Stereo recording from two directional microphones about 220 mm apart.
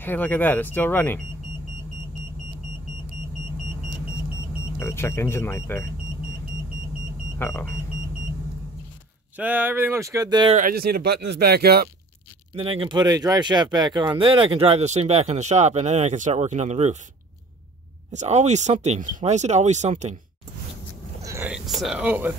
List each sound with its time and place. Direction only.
0.0 s speech: 10° left (ahead or behind)
4.7 s speech: 10° left (ahead or behind)
7.3 s speech: 10° left (ahead or behind)
9.4 s speech: 10° right (ahead or behind)
10.5 s speech: 40° right (ahead or behind)
12.5 s speech: 25° right (ahead or behind)
18.1 s speech: 30° right (ahead or behind)
21.2 s a sound: 10° right (ahead or behind)